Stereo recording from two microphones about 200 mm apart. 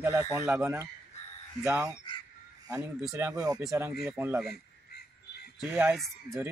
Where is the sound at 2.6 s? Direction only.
15° right (ahead or behind).